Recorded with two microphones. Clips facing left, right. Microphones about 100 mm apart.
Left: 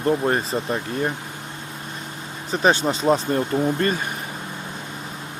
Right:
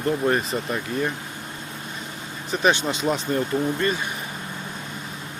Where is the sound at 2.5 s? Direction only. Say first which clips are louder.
Left 2 dB; 35° left (ahead or behind).